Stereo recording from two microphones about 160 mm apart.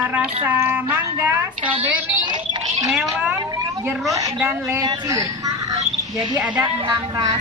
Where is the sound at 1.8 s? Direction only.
30° right (ahead or behind).